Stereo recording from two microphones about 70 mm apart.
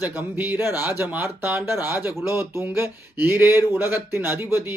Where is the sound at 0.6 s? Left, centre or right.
Left.